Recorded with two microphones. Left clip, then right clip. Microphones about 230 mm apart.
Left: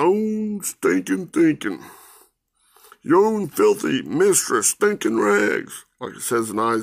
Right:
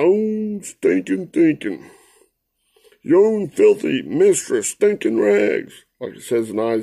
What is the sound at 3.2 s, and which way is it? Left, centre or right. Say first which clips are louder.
Speech: right 3 dB; left.